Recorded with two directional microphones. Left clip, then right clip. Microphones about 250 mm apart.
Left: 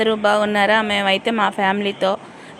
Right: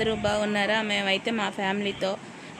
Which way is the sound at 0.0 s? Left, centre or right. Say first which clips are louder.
Left 9 dB; centre.